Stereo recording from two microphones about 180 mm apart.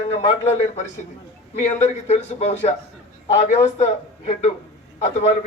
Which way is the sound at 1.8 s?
40° left (ahead or behind).